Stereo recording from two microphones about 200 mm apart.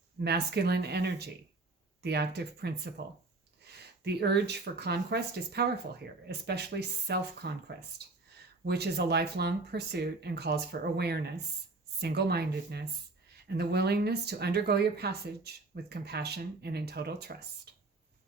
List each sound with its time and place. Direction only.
0.2 s speech: 55° right (ahead or behind)